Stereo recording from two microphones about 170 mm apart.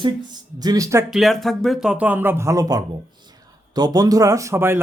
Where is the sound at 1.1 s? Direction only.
Centre (ahead or behind).